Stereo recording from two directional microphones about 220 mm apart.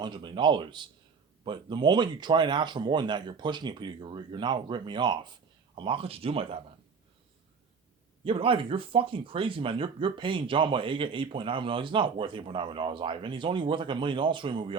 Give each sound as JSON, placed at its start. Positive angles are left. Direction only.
{"t": 0.0, "sound": "speech", "side_deg": -20}
{"t": 8.2, "sound": "speech", "side_deg": -25}